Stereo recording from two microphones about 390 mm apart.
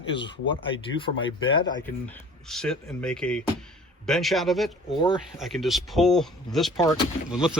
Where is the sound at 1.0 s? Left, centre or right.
Centre.